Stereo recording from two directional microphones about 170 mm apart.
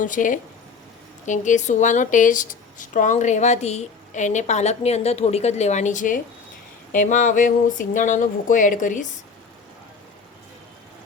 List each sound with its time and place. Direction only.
0.0 s speech: 50° left (ahead or behind)